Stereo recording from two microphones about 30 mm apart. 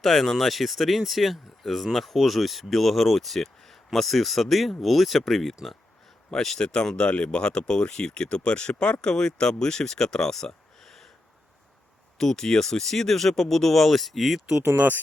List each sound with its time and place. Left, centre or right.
0.0 s speech: centre
6.6 s speech: left
10.8 s a sound: centre
12.1 s speech: centre